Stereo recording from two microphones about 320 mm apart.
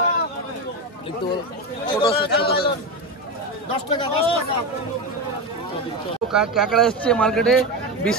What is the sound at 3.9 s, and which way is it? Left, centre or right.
Speech, centre.